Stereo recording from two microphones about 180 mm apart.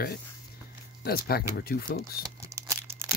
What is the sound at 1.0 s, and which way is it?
Speech, 60° left (ahead or behind).